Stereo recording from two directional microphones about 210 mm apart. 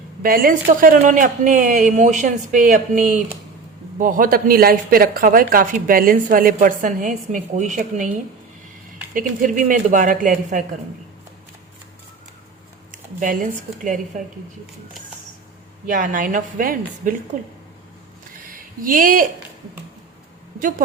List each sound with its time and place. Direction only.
0.2 s speech: 40° right (ahead or behind)
9.1 s speech: 35° right (ahead or behind)
12.9 s speech: 40° right (ahead or behind)
15.9 s speech: 40° right (ahead or behind)
18.4 s a sound: 40° right (ahead or behind)
20.6 s speech: 40° right (ahead or behind)